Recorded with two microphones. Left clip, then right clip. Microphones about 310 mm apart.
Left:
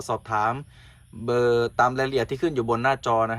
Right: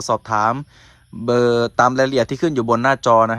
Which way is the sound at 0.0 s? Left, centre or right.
Right.